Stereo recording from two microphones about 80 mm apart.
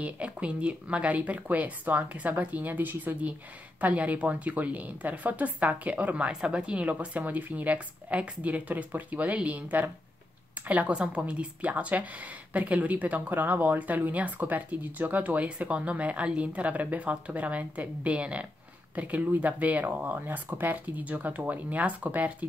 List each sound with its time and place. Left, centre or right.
0.0 s a woman's voice: centre